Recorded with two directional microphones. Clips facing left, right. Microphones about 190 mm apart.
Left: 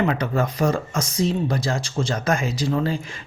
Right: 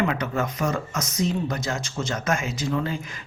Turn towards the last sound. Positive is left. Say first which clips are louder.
# left 4 dB
turn(degrees=35)  # may be behind; listen again after turning